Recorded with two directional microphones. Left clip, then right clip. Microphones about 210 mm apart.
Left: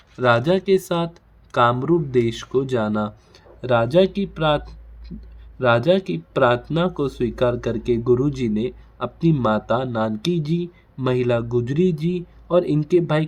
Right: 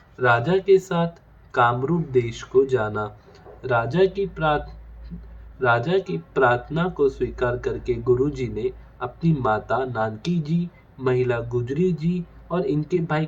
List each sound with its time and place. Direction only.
0.2 s speech: 50° left (ahead or behind)